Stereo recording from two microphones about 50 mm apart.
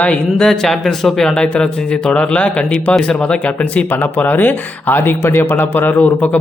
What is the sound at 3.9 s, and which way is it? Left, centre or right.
Speech, left.